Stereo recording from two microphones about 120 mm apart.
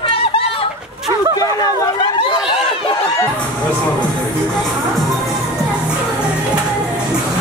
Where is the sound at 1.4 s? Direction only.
30° left (ahead or behind).